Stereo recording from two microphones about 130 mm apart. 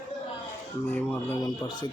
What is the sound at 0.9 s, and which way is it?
Speech, 15° left (ahead or behind).